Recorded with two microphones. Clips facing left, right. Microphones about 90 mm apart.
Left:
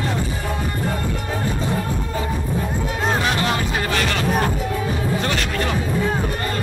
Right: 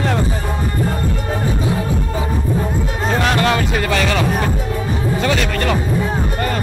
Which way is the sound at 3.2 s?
70° right (ahead or behind).